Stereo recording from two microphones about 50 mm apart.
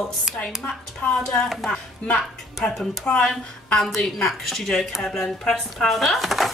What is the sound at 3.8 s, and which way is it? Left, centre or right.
Speech, centre.